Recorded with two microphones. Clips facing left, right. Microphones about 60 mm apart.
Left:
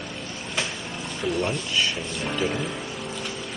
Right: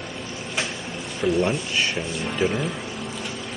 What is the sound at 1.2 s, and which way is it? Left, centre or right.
Speech, right.